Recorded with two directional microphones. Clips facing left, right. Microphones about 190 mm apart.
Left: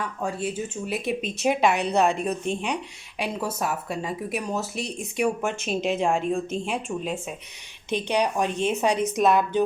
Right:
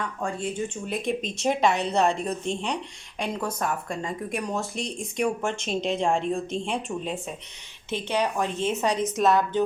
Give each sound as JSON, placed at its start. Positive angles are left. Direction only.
{"t": 0.0, "sound": "speech", "side_deg": 5}
{"t": 7.9, "sound": "speech", "side_deg": 15}